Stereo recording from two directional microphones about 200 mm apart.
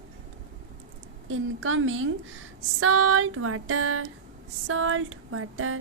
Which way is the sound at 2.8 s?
90° right.